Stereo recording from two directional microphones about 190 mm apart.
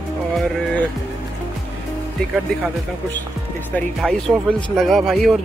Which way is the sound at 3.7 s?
5° left (ahead or behind).